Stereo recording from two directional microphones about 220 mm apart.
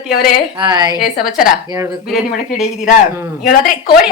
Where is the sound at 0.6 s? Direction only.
20° right (ahead or behind).